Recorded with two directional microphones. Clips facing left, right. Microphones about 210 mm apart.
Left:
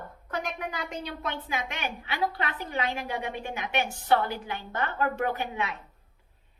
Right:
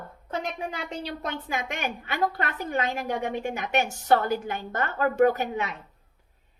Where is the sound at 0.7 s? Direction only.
30° right (ahead or behind).